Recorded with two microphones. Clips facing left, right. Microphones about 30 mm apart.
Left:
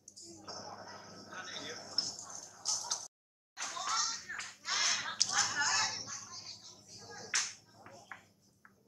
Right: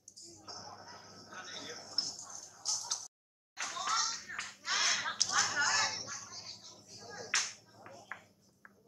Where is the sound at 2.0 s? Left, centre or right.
Centre.